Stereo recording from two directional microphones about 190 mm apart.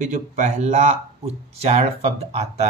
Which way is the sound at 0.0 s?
40° right (ahead or behind).